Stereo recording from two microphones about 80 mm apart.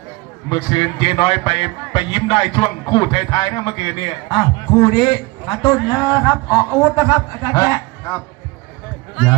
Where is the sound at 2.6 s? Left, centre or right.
Left.